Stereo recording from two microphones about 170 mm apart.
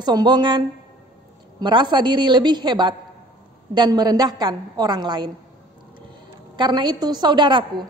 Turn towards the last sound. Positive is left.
turn(degrees=-25)  # may be behind; listen again after turning